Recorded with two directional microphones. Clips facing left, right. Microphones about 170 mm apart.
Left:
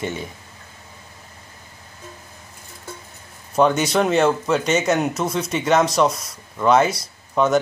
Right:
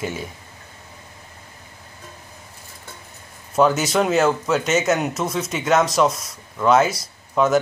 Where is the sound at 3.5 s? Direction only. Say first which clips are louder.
Even; centre (ahead or behind).